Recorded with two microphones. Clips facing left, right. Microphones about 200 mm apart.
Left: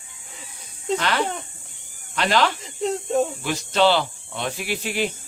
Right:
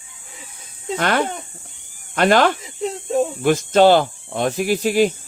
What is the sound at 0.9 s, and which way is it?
Speech, 50° right (ahead or behind).